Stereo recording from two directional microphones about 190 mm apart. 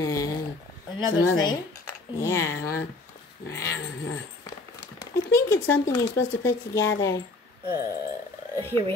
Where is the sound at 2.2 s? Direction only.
15° left (ahead or behind).